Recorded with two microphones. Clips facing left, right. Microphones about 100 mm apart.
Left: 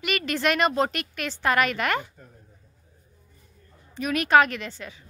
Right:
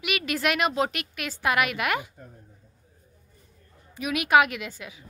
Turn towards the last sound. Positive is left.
turn(degrees=-10)  # may be behind; listen again after turning